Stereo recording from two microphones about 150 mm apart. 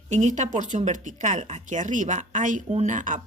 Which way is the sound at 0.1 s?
55° right (ahead or behind).